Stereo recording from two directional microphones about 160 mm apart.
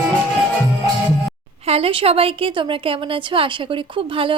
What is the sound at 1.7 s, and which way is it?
Speech, 35° right (ahead or behind).